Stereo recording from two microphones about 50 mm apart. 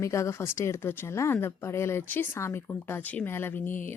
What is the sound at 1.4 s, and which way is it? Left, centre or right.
Speech, left.